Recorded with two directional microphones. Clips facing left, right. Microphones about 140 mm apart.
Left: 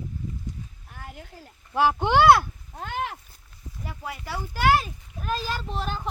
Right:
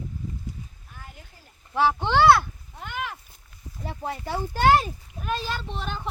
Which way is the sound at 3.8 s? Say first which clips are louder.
Right 4 dB; 30° right (ahead or behind).